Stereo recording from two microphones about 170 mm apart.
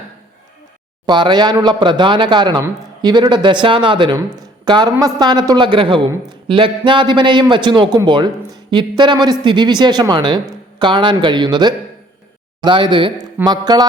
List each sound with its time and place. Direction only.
1.0 s speech: 25° right (ahead or behind)